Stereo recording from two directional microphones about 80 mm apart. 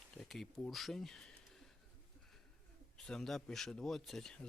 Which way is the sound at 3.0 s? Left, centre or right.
Centre.